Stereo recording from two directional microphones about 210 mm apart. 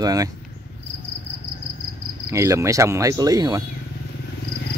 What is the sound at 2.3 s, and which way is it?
Cricket, 15° right (ahead or behind).